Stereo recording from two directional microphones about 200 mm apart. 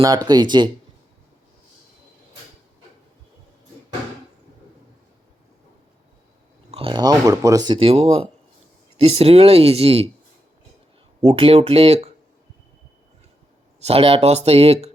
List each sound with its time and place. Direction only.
0.3 s speech: 20° right (ahead or behind)
6.7 s speech: 30° right (ahead or behind)
11.2 s speech: 30° right (ahead or behind)
13.7 s speech: 30° right (ahead or behind)